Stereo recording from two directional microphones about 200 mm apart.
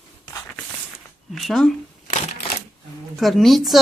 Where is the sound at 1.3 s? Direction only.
Centre (ahead or behind).